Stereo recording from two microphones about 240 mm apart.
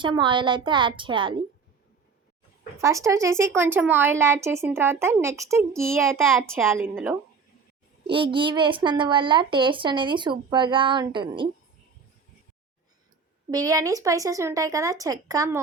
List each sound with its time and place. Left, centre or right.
0.0 s a child's voice: centre
2.8 s speech: centre
8.1 s a child's voice: right
13.5 s speech: centre